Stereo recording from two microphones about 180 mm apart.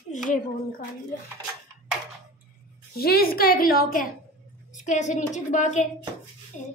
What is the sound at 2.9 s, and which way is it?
A woman's voice, 60° left (ahead or behind).